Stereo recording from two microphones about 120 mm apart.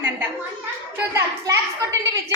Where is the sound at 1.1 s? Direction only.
25° right (ahead or behind).